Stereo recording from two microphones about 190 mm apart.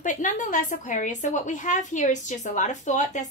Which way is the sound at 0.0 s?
40° left (ahead or behind).